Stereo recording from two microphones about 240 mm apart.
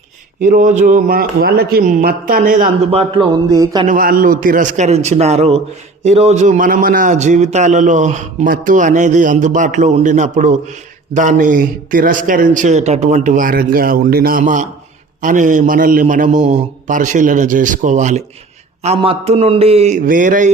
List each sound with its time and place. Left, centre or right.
0.4 s a man's voice: right; by 3.8 s centre
3.8 s a man's voice: right